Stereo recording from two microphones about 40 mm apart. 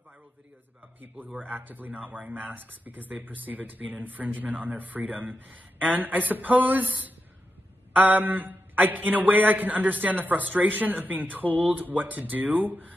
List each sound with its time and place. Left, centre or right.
1.1 s speech: right
8.0 s speech: right